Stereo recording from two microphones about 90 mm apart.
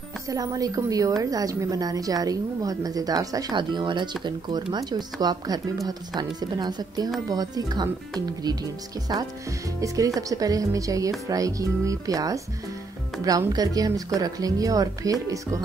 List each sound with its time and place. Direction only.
0.3 s a woman's voice: 45° right (ahead or behind)
3.5 s a woman's voice: 60° right (ahead or behind)
9.1 s a woman's voice: 50° right (ahead or behind)
9.8 s speech: 40° right (ahead or behind)
13.5 s speech: 45° right (ahead or behind)